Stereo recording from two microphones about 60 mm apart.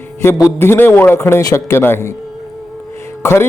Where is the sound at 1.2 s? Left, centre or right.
Left.